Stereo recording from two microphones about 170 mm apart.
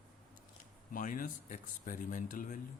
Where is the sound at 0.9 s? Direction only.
55° left (ahead or behind).